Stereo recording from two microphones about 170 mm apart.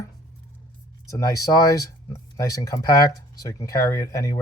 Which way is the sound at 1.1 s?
20° left (ahead or behind).